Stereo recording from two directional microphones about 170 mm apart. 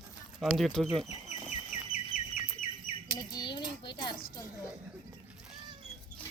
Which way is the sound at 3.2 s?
25° left (ahead or behind).